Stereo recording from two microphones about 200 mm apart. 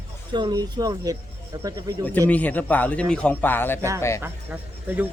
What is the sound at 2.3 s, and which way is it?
Speech, 10° left (ahead or behind).